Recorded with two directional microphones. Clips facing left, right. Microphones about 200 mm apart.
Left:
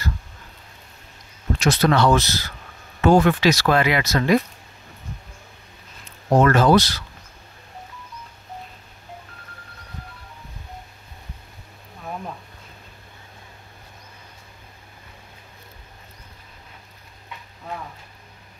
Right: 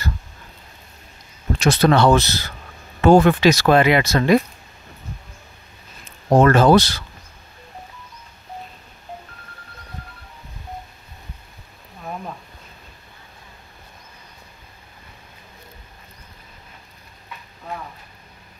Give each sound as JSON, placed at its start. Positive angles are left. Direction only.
{"t": 1.6, "sound": "speech", "side_deg": -30}
{"t": 6.3, "sound": "speech", "side_deg": -30}